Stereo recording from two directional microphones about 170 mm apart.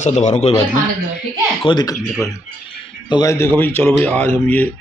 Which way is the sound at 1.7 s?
25° left (ahead or behind).